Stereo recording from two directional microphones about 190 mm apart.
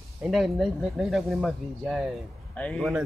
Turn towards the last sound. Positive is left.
turn(degrees=0)  # may be behind; listen again after turning